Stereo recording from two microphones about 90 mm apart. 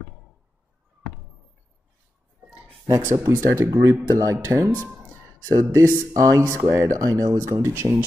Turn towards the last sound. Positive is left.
turn(degrees=-30)  # may be behind; listen again after turning